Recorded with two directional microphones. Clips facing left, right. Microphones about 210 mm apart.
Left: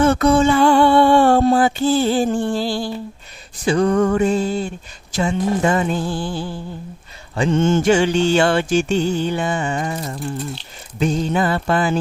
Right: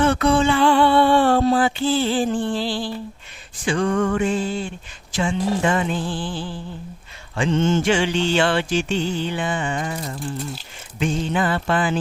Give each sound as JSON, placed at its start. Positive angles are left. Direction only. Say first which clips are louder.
{"t": 0.0, "sound": "music", "louder": "left 3 dB", "side_deg": 45}
{"t": 11.0, "sound": "music", "louder": "left 3 dB", "side_deg": 40}